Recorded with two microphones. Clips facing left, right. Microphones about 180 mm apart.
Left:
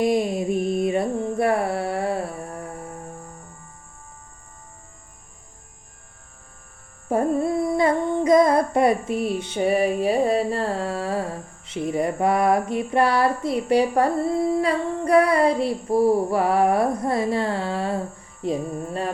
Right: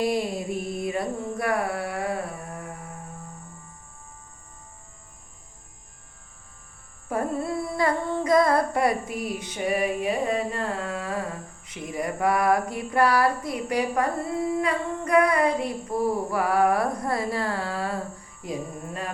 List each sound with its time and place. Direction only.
0.0 s a sound: 20° left (ahead or behind)
7.1 s humming: 25° left (ahead or behind)
18.4 s carnatic music: 30° left (ahead or behind)